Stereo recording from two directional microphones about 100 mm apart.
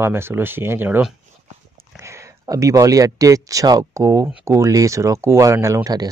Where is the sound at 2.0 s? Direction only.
30° right (ahead or behind).